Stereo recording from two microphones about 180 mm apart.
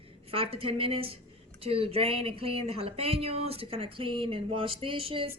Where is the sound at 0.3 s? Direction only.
30° right (ahead or behind).